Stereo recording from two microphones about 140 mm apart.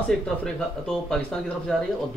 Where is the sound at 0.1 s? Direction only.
5° left (ahead or behind).